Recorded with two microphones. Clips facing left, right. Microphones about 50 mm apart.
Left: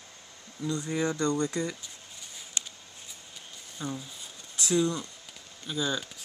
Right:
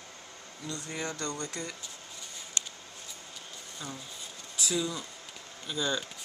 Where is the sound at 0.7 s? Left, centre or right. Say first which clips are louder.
Left 7 dB; left.